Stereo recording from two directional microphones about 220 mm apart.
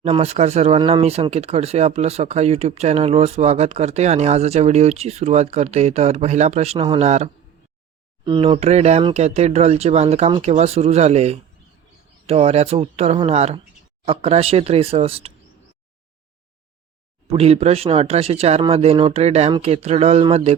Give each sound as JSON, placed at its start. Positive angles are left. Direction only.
{"t": 0.0, "sound": "speech", "side_deg": -30}
{"t": 17.2, "sound": "speech", "side_deg": -25}